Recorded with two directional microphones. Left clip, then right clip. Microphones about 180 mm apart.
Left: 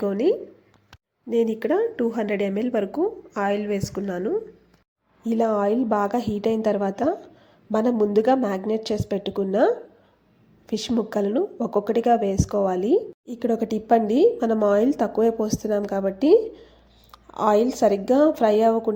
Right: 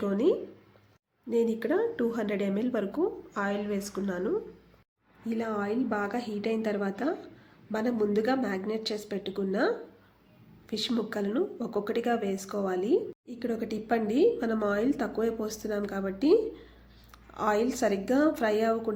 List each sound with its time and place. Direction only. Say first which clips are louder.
0.0 s a woman's voice: left 5 dB; 25° left (ahead or behind)
1.5 s a woman's voice: left 6 dB; 25° left (ahead or behind)
5.2 s a woman's voice: left 11 dB; 40° left (ahead or behind)